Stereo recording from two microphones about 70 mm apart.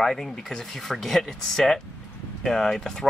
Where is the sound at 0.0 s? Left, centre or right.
Centre.